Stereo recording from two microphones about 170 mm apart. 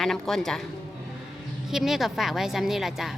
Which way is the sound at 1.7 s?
Centre (ahead or behind).